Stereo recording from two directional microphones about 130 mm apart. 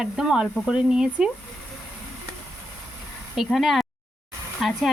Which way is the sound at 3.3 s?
Centre (ahead or behind).